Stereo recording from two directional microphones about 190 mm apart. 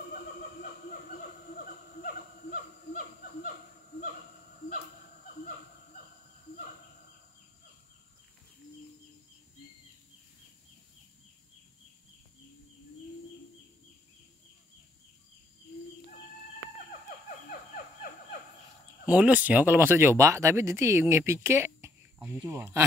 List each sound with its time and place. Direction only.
1.6 s snicker: 50° left (ahead or behind)
19.0 s speech: 5° right (ahead or behind)